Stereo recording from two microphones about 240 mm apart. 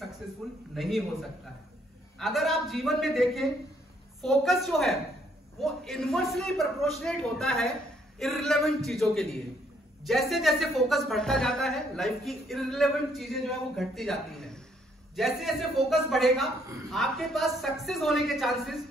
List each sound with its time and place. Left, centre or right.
0.4 s a woman's voice: centre
2.1 s a woman's voice: centre